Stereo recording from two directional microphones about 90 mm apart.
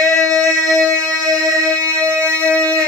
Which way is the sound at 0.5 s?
45° right (ahead or behind).